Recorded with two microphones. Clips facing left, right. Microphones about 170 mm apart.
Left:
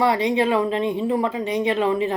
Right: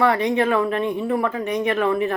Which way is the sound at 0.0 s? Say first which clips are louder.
Even; 15° left (ahead or behind).